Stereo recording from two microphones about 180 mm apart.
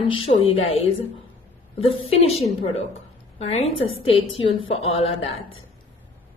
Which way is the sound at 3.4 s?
35° left (ahead or behind).